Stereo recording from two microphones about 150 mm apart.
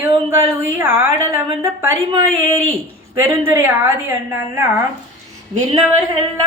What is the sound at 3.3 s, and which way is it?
Speech, 15° right (ahead or behind).